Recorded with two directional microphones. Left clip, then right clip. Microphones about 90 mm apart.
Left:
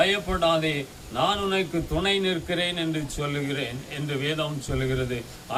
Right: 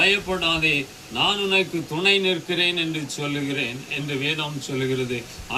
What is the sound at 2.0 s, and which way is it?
Speech, 40° left (ahead or behind).